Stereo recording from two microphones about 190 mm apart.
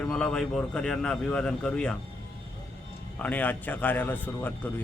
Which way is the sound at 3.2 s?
10° left (ahead or behind).